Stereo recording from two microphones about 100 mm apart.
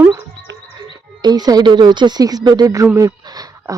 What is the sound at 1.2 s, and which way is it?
Speech, 40° right (ahead or behind).